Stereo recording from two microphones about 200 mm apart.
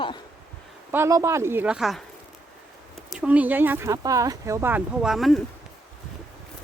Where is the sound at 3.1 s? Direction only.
5° right (ahead or behind).